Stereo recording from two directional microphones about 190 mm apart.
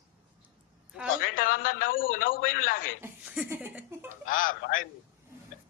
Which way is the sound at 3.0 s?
5° right (ahead or behind).